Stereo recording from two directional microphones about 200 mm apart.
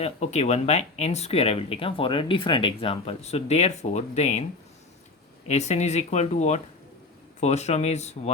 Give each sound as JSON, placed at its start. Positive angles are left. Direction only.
{"t": 0.0, "sound": "speech", "side_deg": 35}
{"t": 5.5, "sound": "speech", "side_deg": 35}